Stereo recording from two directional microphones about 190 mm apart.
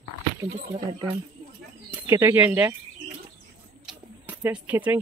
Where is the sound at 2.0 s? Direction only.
15° right (ahead or behind).